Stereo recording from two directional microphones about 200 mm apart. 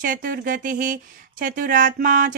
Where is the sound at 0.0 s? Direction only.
45° right (ahead or behind).